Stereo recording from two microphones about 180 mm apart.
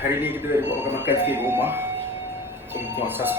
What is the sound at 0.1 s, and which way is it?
Speech, 10° right (ahead or behind).